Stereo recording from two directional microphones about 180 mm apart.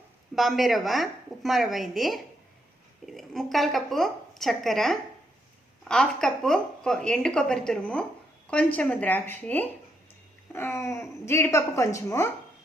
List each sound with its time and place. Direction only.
0.3 s a woman's voice: centre (ahead or behind); by 12.3 s 15° left (ahead or behind)